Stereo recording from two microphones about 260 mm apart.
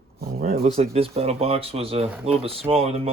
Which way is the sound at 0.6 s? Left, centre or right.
Right.